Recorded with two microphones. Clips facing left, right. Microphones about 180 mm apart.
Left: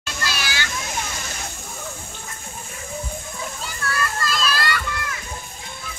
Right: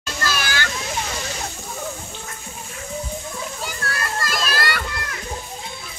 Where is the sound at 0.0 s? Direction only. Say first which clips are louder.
Right 3 dB; 45° right (ahead or behind).